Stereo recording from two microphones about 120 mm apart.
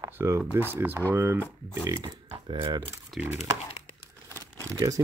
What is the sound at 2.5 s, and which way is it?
Speech, 40° right (ahead or behind).